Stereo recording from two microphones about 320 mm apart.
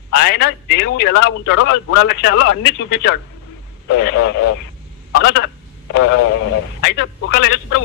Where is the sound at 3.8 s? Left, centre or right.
Left.